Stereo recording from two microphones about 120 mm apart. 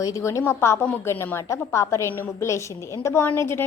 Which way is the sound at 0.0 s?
25° left (ahead or behind).